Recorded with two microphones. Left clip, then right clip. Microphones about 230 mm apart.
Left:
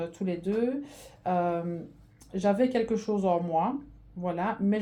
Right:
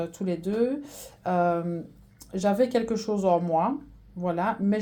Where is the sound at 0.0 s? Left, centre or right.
Right.